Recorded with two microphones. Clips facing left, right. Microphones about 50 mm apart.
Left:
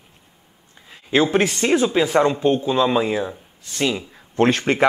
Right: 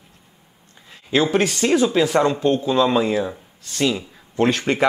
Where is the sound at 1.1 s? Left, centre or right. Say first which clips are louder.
Left 1 dB; left.